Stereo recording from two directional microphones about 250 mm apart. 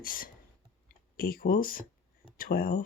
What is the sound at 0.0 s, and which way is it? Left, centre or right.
Speech, left.